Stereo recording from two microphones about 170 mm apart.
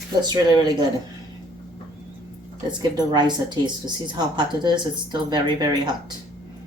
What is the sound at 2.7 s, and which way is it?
A woman's voice, 25° right (ahead or behind).